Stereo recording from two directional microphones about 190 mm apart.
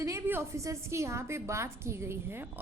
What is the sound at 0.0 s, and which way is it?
A woman's voice, 15° right (ahead or behind).